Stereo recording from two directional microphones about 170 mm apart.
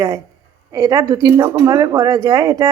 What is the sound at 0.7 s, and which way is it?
Speech, 20° right (ahead or behind).